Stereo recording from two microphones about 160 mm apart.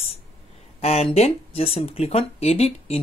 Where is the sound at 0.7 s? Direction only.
40° left (ahead or behind).